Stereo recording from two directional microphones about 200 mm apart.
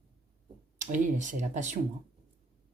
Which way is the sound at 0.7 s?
40° right (ahead or behind).